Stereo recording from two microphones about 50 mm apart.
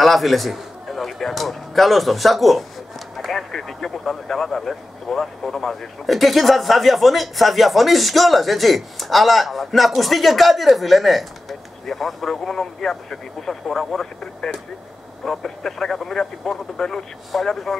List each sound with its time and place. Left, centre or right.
0.0 s a man's voice: centre